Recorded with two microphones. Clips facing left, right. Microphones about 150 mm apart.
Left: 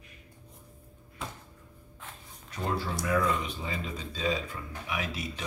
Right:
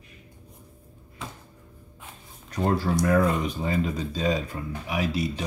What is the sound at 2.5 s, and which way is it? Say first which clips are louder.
Speech: right 8 dB; 40° right (ahead or behind).